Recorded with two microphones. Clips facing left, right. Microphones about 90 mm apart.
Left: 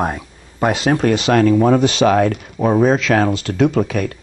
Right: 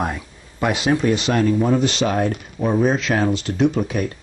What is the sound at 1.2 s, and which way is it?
Speech, 90° left.